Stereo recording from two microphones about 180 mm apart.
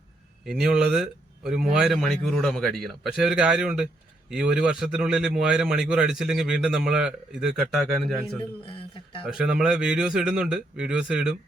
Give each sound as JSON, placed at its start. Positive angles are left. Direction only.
{"t": 0.4, "sound": "a man's voice", "side_deg": -5}
{"t": 8.6, "sound": "speech", "side_deg": 30}
{"t": 9.2, "sound": "a man's voice", "side_deg": -5}